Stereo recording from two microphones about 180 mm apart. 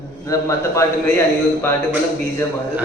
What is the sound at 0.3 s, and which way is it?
Speech, 15° left (ahead or behind).